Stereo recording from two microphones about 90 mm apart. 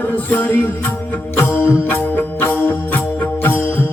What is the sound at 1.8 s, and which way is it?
Music, 20° left (ahead or behind).